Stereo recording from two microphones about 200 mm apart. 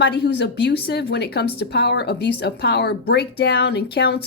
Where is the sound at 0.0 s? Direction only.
55° left (ahead or behind).